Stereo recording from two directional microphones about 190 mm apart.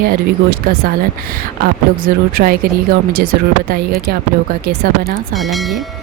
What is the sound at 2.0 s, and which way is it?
Speech, 50° right (ahead or behind).